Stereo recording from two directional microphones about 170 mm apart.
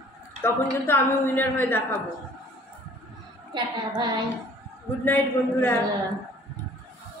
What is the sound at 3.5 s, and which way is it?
Speech, 25° right (ahead or behind).